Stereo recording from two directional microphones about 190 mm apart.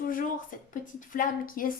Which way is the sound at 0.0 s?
45° left (ahead or behind).